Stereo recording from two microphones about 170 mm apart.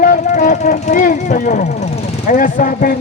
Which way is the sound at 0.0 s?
50° left (ahead or behind).